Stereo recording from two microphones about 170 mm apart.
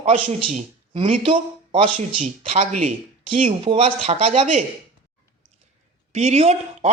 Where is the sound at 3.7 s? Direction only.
30° right (ahead or behind).